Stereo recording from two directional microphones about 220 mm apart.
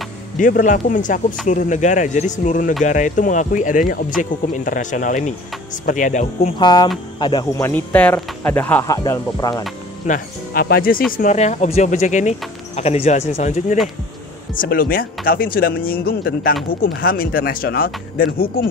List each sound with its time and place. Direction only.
0.4 s speech: 35° left (ahead or behind)
6.6 s speech: 20° left (ahead or behind)
10.0 s speech: 40° left (ahead or behind)